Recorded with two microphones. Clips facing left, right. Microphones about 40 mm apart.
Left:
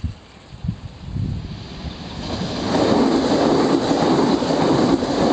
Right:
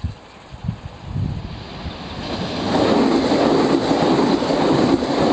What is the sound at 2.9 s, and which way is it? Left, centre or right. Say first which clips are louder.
Vehicle: right 1 dB; right.